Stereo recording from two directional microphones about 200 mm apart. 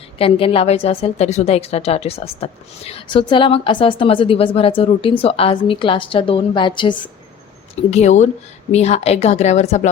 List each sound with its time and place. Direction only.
0.2 s a woman's voice: 30° left (ahead or behind)